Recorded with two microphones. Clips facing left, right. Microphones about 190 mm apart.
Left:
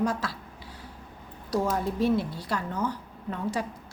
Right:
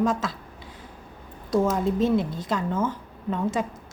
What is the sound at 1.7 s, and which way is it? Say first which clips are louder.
A woman's voice: right 3 dB; 20° right (ahead or behind).